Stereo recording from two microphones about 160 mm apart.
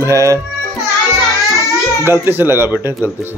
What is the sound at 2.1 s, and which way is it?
Speech, 15° right (ahead or behind).